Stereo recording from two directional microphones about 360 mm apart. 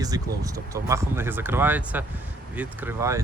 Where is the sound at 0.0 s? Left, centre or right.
Centre.